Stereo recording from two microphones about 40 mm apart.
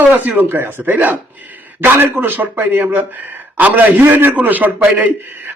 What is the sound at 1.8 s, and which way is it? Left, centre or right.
Speech, right.